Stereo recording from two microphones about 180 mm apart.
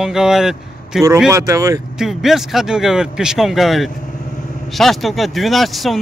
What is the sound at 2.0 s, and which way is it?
Speech, centre (ahead or behind).